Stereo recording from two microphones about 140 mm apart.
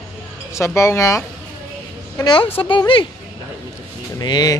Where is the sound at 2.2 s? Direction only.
35° left (ahead or behind).